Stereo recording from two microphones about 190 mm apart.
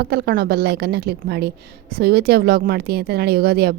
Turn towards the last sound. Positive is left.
turn(degrees=-55)  # may be behind; listen again after turning